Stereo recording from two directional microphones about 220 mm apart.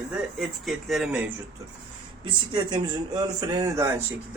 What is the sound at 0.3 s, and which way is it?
Speech, centre (ahead or behind).